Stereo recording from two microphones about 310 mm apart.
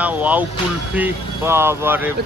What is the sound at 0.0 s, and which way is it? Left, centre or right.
A man's voice, centre.